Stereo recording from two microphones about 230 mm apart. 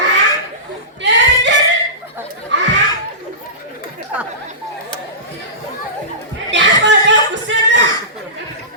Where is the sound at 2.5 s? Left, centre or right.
Right.